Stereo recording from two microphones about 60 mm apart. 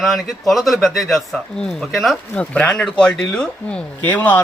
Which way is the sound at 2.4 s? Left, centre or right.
Left.